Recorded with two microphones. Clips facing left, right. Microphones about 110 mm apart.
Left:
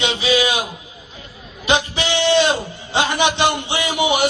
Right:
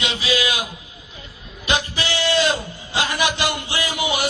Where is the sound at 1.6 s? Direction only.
25° left (ahead or behind).